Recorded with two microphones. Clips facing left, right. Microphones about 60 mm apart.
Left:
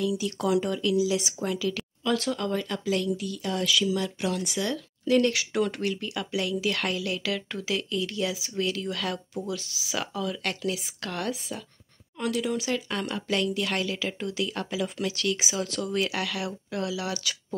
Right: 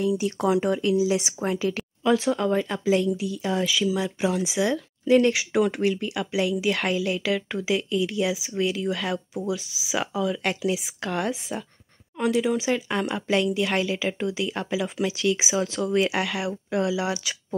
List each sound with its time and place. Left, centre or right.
0.0 s speech: right
2.1 s speech: centre